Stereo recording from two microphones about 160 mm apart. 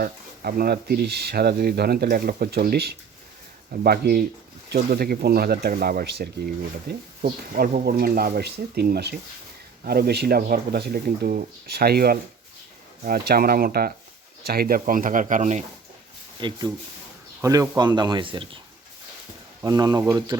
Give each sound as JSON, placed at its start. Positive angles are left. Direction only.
{"t": 0.0, "sound": "speech", "side_deg": -70}
{"t": 9.8, "sound": "speech", "side_deg": -75}
{"t": 16.4, "sound": "speech", "side_deg": -25}
{"t": 19.6, "sound": "speech", "side_deg": -25}